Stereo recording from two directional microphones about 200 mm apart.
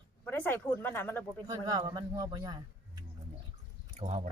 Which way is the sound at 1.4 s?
20° right (ahead or behind).